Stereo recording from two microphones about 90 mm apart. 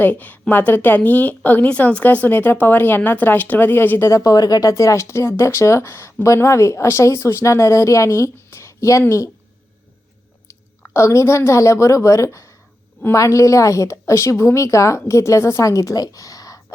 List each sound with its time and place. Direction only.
0.0 s a woman's voice: 20° left (ahead or behind)
4.1 s speech: 40° left (ahead or behind)
10.9 s speech: 35° left (ahead or behind)